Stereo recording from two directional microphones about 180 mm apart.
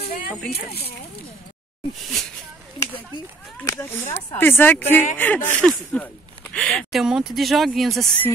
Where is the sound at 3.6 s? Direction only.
15° left (ahead or behind); by 8.0 s centre (ahead or behind).